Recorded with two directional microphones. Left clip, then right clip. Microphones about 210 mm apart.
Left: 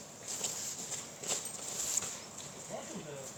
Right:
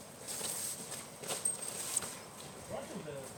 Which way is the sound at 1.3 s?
5° left (ahead or behind).